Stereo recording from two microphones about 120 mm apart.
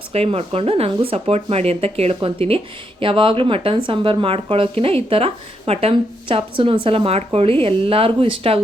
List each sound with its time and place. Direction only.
0.1 s speech: 55° right (ahead or behind)